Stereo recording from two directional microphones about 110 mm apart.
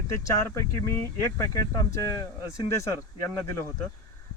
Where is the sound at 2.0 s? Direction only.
30° left (ahead or behind).